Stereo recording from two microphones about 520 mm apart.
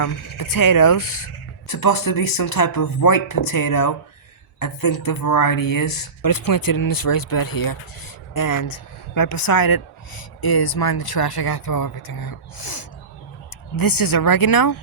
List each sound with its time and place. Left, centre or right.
0.0 s speech: left